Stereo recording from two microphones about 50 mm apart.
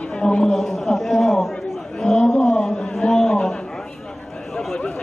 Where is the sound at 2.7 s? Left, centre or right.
Centre.